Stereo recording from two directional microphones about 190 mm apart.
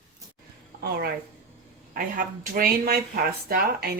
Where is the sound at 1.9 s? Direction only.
50° right (ahead or behind).